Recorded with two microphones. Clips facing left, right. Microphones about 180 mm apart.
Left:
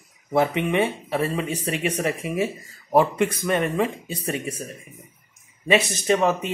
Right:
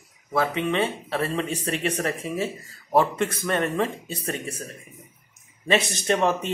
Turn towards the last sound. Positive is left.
turn(degrees=5)  # may be behind; listen again after turning